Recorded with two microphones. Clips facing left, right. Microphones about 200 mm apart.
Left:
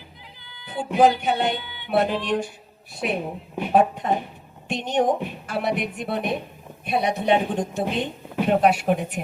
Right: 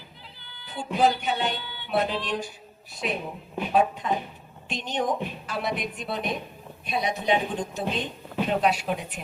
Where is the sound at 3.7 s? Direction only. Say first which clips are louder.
Left 4 dB; 55° left (ahead or behind).